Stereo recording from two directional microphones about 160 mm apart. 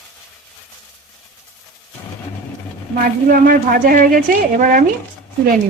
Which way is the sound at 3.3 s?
65° right (ahead or behind).